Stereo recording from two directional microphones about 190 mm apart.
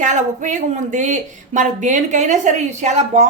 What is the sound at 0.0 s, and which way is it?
Speech, 40° right (ahead or behind).